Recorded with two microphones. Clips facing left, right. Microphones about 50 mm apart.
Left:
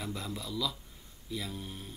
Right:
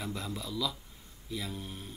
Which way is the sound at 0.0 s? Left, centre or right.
Centre.